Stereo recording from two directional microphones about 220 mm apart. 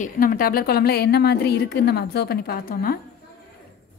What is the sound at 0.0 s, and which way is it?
A woman's voice, 40° left (ahead or behind).